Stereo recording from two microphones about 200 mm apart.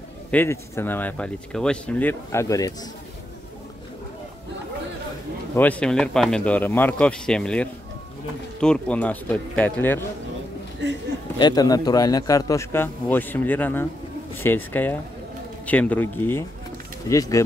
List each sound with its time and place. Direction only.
0.3 s speech: 10° left (ahead or behind)
5.6 s speech: 5° left (ahead or behind)
11.3 s speech: 20° left (ahead or behind)